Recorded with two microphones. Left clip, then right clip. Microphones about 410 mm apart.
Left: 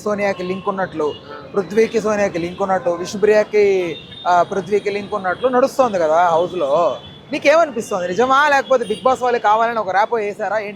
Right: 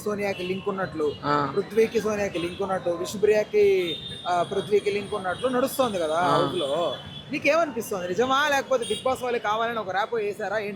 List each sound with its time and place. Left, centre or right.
0.0 s speech: centre